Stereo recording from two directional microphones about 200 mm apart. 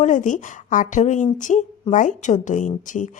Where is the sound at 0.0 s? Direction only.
40° left (ahead or behind).